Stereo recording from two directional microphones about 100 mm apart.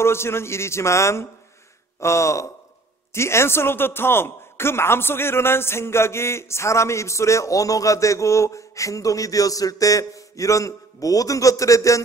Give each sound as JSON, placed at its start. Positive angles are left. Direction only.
{"t": 0.0, "sound": "speech", "side_deg": 25}